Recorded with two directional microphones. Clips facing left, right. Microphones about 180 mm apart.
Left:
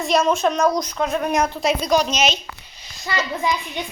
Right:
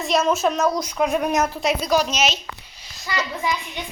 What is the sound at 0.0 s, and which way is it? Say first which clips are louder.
Speech: left 1 dB; centre (ahead or behind).